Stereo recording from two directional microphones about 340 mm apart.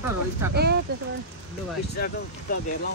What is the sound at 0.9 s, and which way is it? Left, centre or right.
Speech, right.